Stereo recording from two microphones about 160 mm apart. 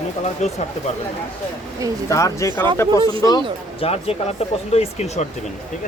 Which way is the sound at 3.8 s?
40° left (ahead or behind).